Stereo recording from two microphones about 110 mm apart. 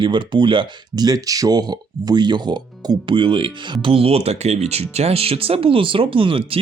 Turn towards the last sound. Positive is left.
turn(degrees=-55)  # may be behind; listen again after turning